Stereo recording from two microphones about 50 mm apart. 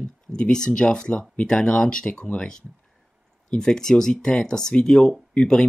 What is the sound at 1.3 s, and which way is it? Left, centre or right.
Speech, left.